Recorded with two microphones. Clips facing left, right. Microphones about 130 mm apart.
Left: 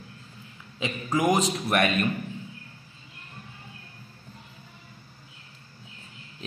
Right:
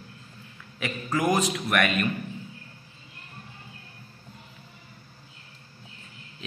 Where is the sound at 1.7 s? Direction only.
35° left (ahead or behind).